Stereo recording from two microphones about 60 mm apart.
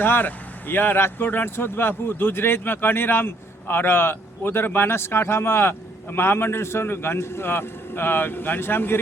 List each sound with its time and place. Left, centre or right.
0.0 s speech: left